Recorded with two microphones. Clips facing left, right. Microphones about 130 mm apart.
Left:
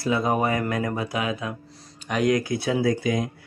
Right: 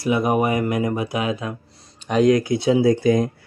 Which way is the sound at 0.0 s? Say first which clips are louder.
Right 3 dB; 15° right (ahead or behind).